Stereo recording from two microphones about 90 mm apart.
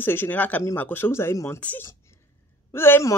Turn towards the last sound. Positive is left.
turn(degrees=25)  # may be behind; listen again after turning